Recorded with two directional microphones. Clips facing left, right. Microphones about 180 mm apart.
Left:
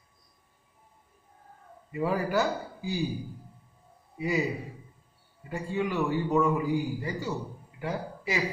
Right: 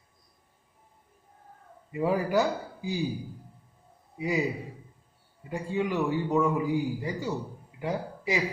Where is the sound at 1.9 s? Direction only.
15° right (ahead or behind).